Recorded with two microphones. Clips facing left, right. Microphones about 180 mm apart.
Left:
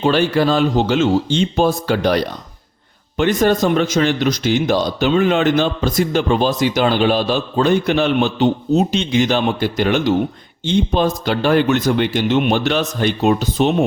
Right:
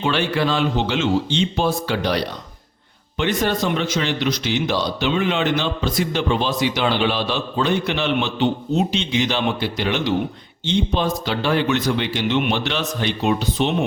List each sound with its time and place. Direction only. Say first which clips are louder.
0.0 s a man's voice: left 5 dB; 40° left (ahead or behind)